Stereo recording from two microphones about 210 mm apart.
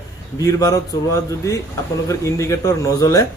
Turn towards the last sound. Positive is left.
turn(degrees=15)  # may be behind; listen again after turning